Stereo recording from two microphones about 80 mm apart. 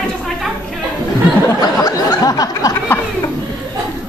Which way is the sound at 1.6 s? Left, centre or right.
Left.